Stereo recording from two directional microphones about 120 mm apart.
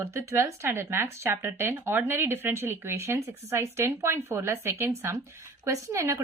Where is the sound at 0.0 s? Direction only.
25° right (ahead or behind).